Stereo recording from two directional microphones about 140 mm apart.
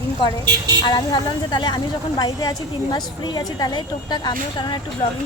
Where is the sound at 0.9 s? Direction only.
30° left (ahead or behind).